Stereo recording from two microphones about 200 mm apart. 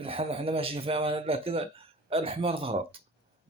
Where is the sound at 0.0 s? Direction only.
30° right (ahead or behind).